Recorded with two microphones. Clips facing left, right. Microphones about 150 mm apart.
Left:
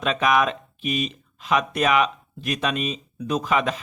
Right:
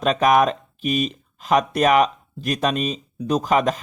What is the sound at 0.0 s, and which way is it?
Speech, 40° right (ahead or behind).